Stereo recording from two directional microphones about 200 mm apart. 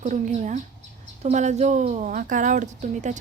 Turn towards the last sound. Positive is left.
turn(degrees=-40)  # may be behind; listen again after turning